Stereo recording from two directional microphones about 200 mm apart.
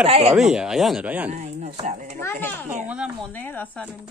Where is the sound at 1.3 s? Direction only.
35° right (ahead or behind).